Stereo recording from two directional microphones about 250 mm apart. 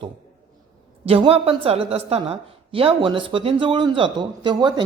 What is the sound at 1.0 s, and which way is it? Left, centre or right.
A woman's voice, right.